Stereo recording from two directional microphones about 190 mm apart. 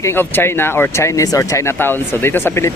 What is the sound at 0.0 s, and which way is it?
Speech, 10° left (ahead or behind).